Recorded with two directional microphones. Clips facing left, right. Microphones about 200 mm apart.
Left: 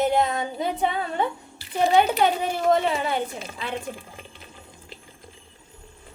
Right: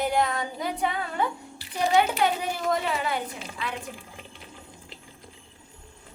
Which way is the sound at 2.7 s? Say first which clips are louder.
Left 6 dB; 25° left (ahead or behind).